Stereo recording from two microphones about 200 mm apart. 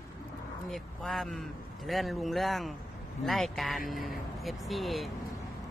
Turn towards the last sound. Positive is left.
turn(degrees=0)  # may be behind; listen again after turning